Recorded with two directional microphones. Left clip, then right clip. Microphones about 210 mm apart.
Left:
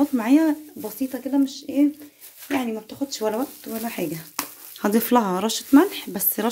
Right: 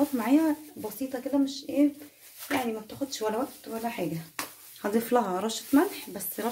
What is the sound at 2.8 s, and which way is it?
Speech, 40° left (ahead or behind).